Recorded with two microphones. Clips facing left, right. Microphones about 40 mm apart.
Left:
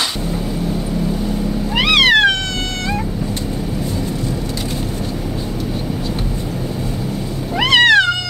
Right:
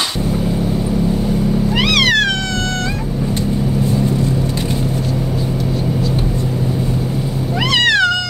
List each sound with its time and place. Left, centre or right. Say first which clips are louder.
1.9 s cat: left 4 dB; left
7.7 s cat: left 3 dB; left